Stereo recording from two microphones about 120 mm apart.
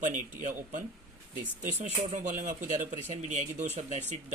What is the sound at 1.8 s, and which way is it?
Speech, 85° right.